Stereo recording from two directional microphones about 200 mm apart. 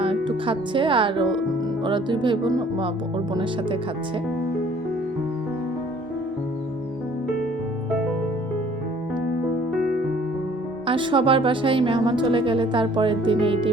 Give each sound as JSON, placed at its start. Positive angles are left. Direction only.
{"t": 0.0, "sound": "a woman's voice", "side_deg": -25}
{"t": 10.8, "sound": "a woman's voice", "side_deg": -25}